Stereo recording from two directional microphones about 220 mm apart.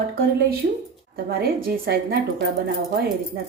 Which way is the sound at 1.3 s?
45° right (ahead or behind).